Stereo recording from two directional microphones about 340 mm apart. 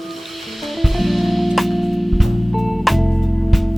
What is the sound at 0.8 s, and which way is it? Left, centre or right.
Music, centre.